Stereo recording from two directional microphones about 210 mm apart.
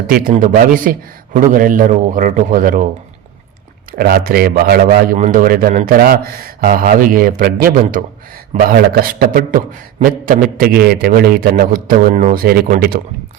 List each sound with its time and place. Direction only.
0.3 s a man's voice: 40° right (ahead or behind)
3.9 s a man's voice: 45° right (ahead or behind)